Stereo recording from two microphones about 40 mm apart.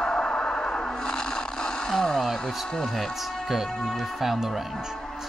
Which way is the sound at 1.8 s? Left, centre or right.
Centre.